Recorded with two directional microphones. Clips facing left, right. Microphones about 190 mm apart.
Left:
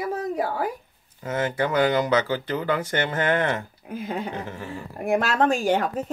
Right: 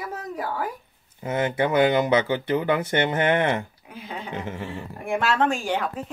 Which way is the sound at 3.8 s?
45° left (ahead or behind).